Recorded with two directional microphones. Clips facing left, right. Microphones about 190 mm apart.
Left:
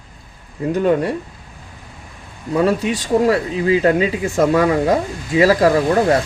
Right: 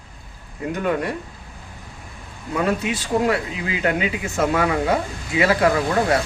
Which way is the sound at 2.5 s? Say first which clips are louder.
Left 5 dB; 35° left (ahead or behind).